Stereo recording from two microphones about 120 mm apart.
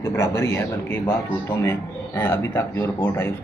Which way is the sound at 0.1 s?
25° left (ahead or behind).